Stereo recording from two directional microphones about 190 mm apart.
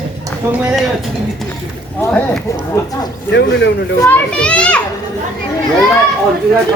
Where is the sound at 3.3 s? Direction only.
65° left (ahead or behind).